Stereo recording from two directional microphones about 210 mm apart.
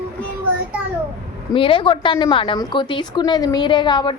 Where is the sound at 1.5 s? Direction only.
25° left (ahead or behind).